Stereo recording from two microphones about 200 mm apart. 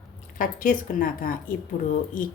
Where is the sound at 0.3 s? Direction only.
45° left (ahead or behind).